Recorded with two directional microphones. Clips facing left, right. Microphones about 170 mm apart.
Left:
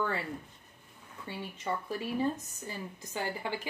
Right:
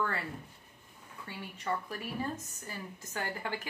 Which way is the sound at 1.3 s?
20° left (ahead or behind).